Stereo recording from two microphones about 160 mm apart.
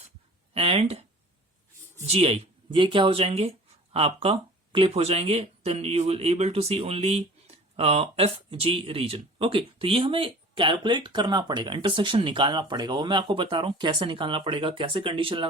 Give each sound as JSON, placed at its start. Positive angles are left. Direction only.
{"t": 0.5, "sound": "speech", "side_deg": -35}
{"t": 2.0, "sound": "speech", "side_deg": -40}